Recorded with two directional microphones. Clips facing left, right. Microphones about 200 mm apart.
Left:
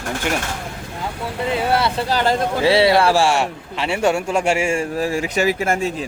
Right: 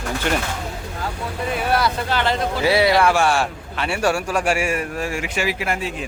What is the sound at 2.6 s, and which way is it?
A man's voice, 25° left (ahead or behind).